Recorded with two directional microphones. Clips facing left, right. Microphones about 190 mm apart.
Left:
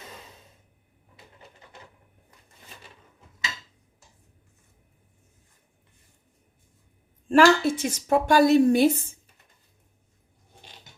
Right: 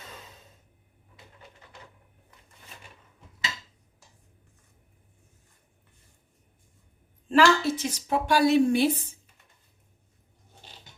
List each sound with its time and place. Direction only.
7.3 s a woman's voice: 50° left (ahead or behind)